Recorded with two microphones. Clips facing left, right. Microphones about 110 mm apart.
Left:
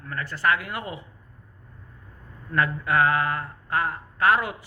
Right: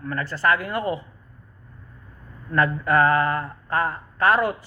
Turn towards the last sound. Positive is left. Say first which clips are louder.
# right 2 dB
turn(degrees=-35)  # may be behind; listen again after turning